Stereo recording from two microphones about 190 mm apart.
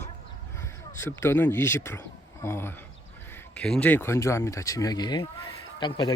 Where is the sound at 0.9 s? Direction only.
10° left (ahead or behind).